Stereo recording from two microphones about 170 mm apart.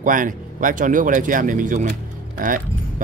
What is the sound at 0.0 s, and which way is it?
Speech, 50° right (ahead or behind).